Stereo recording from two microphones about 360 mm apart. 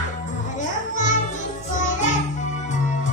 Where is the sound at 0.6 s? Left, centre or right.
Left.